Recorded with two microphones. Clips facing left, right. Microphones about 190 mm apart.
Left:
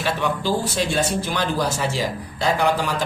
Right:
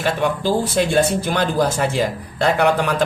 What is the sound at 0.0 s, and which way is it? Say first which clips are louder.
Speech: right 3 dB; 50° right (ahead or behind).